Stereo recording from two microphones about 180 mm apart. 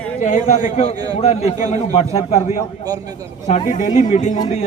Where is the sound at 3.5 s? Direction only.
40° left (ahead or behind).